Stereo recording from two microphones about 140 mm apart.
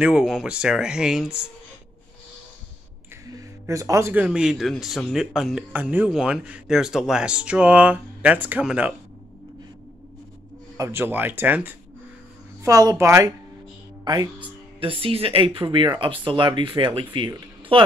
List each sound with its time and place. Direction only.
0.0 s speech: 5° right (ahead or behind)
3.3 s speech: 25° right (ahead or behind); by 8.9 s 10° right (ahead or behind)
10.8 s speech: 15° right (ahead or behind)
14.8 s speech: 40° right (ahead or behind)